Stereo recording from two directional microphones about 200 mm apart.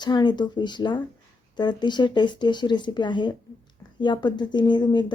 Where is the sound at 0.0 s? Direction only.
20° left (ahead or behind).